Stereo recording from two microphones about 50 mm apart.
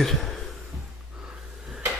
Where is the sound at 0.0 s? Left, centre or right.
Centre.